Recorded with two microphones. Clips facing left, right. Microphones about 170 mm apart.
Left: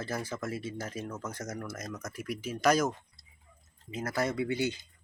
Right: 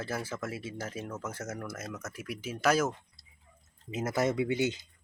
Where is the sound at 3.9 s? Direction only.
20° right (ahead or behind).